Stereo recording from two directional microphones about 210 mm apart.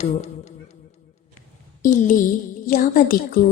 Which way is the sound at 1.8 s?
40° left (ahead or behind).